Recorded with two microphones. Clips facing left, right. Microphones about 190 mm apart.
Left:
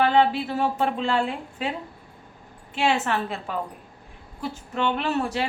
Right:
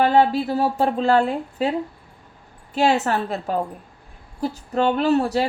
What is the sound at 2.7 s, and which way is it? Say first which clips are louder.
A woman's voice: right 4 dB; 40° right (ahead or behind).